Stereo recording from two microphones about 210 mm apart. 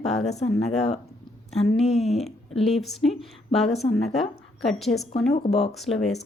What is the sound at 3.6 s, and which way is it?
Speech, 30° left (ahead or behind).